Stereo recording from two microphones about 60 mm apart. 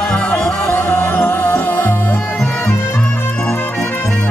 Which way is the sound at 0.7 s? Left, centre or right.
Left.